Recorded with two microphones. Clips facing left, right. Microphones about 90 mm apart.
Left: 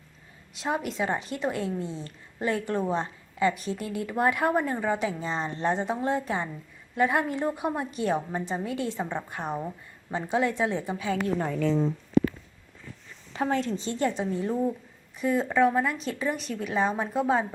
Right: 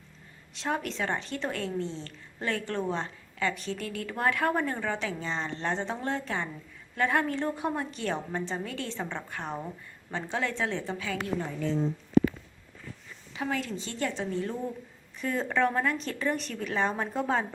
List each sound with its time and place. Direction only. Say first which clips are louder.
0.5 s speech: left 2 dB; 10° left (ahead or behind)
13.3 s a woman's voice: left 5 dB; 35° left (ahead or behind)
13.8 s a woman's voice: left 5 dB; 20° left (ahead or behind)